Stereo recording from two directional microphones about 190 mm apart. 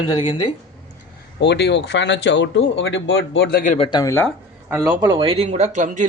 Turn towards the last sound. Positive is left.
turn(degrees=-40)  # may be behind; listen again after turning